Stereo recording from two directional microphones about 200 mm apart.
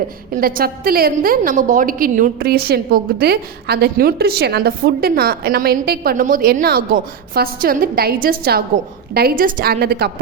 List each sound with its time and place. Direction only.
0.3 s a woman's voice: 45° right (ahead or behind)